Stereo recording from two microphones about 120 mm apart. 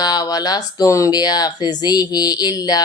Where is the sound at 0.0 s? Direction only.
35° left (ahead or behind).